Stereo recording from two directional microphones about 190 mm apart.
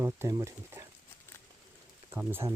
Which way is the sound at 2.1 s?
10° right (ahead or behind).